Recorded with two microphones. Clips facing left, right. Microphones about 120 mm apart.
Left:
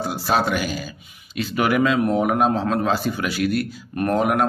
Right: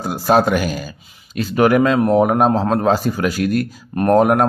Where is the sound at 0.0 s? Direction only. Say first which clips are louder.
Right 6 dB; 45° right (ahead or behind).